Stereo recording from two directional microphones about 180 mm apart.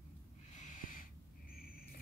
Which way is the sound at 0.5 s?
45° left (ahead or behind).